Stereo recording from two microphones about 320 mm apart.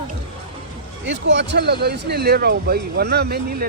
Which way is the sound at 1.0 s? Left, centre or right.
Right.